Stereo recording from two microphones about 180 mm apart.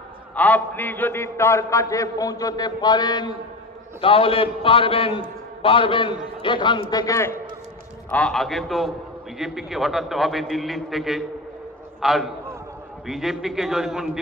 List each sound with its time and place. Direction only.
0.4 s a man's voice: 10° left (ahead or behind)
8.1 s a man's voice: 5° left (ahead or behind)